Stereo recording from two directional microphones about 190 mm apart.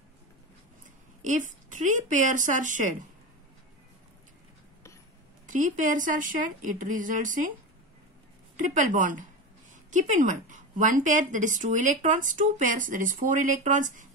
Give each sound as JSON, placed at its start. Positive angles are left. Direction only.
{"t": 1.2, "sound": "speech", "side_deg": -40}
{"t": 5.5, "sound": "a woman's voice", "side_deg": -40}
{"t": 8.5, "sound": "a woman's voice", "side_deg": -40}